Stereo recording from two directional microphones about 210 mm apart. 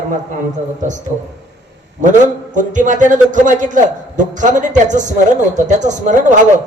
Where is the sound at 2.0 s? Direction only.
35° right (ahead or behind).